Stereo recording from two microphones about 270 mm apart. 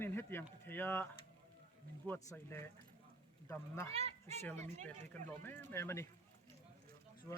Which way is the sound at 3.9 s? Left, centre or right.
Right.